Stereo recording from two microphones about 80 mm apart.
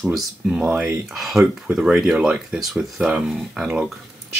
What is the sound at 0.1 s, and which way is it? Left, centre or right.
Speech, centre.